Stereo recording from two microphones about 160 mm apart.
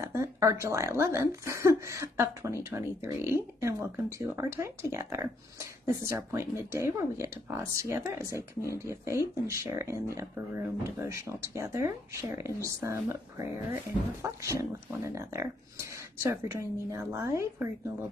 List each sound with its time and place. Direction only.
0.0 s speech: 15° right (ahead or behind)